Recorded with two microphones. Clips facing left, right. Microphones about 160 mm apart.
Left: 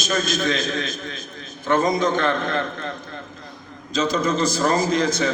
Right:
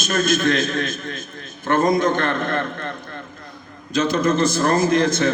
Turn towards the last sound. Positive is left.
turn(degrees=-50)  # may be behind; listen again after turning